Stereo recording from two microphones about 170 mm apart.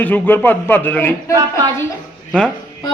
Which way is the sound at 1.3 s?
20° right (ahead or behind).